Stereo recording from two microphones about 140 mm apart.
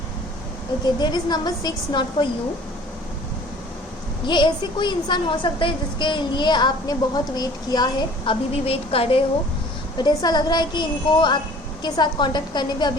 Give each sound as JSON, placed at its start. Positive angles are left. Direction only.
{"t": 0.9, "sound": "a woman's voice", "side_deg": 30}
{"t": 4.3, "sound": "a woman's voice", "side_deg": 35}
{"t": 10.0, "sound": "a woman's voice", "side_deg": 30}